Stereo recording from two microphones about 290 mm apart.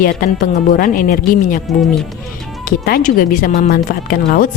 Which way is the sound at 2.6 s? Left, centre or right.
Left.